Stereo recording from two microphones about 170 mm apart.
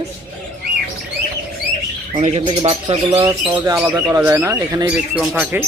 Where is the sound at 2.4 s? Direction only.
30° right (ahead or behind).